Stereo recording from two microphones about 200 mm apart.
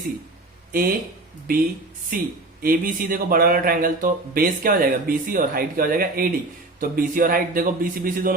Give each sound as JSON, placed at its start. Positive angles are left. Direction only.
{"t": 0.7, "sound": "speech", "side_deg": -45}
{"t": 2.0, "sound": "a man's voice", "side_deg": -45}